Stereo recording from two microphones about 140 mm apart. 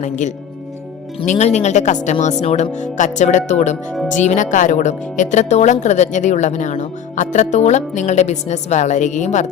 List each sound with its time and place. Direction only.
0.0 s speech: 60° left (ahead or behind)